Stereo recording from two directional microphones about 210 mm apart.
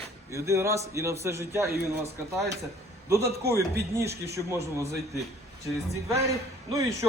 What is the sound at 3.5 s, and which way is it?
Speech, 15° right (ahead or behind).